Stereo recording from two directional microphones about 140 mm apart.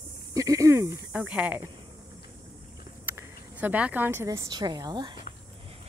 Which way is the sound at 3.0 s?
15° right (ahead or behind).